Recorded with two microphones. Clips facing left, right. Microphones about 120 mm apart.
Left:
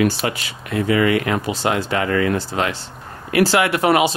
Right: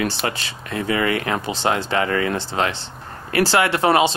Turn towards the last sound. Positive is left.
turn(degrees=-30)  # may be behind; listen again after turning